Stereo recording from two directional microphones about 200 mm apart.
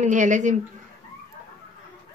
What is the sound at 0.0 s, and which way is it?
Speech, 40° right (ahead or behind).